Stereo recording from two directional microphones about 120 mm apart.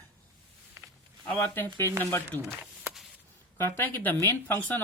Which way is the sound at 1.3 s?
15° left (ahead or behind).